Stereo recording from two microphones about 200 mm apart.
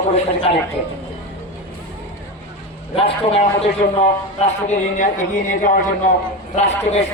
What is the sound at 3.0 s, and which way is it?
A man's voice, 30° left (ahead or behind).